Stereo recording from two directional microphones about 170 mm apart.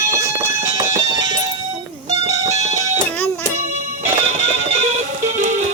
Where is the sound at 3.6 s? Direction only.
40° right (ahead or behind).